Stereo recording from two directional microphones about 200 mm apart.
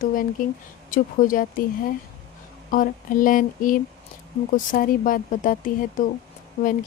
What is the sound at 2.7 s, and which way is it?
Speech, 40° left (ahead or behind).